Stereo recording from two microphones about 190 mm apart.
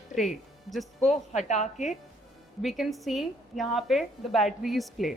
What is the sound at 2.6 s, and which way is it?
A woman's voice, centre (ahead or behind).